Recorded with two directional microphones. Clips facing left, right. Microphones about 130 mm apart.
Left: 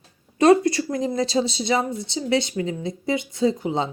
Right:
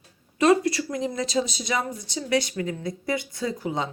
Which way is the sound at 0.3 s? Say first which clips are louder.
Left 4 dB; 35° left (ahead or behind).